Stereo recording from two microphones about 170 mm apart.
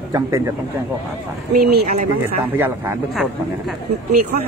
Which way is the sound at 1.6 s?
70° right (ahead or behind).